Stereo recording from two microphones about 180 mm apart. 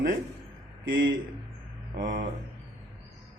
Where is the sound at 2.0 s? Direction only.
50° right (ahead or behind).